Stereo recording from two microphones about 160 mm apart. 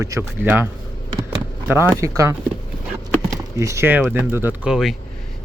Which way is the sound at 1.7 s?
15° right (ahead or behind).